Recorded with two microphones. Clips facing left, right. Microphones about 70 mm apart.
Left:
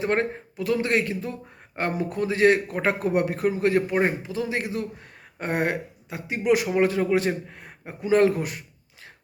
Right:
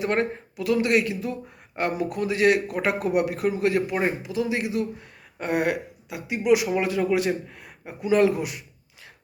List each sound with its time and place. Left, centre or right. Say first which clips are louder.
0.0 s speech: even; left